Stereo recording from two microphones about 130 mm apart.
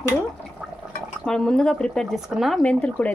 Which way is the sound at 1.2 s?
5° left (ahead or behind).